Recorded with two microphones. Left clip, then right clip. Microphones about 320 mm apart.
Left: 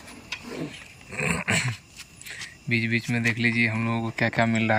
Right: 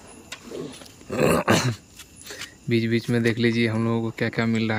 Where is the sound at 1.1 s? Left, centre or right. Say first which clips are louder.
Right 6 dB; right.